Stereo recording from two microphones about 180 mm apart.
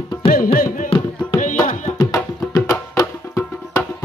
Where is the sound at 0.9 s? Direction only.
30° left (ahead or behind).